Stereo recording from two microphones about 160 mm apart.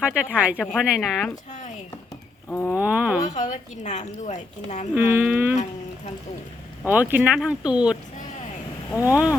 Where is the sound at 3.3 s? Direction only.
50° left (ahead or behind).